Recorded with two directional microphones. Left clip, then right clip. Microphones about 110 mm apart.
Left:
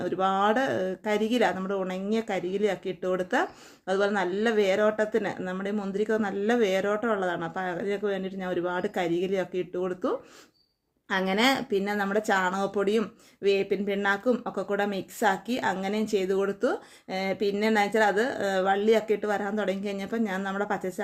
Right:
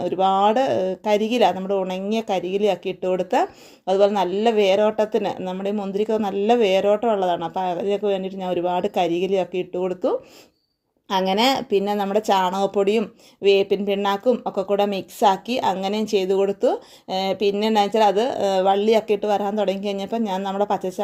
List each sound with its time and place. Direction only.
0.0 s speech: 35° right (ahead or behind)